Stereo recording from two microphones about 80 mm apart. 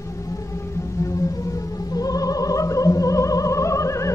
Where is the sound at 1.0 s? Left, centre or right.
Left.